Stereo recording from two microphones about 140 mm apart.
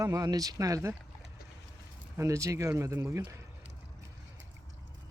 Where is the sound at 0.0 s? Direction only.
25° right (ahead or behind).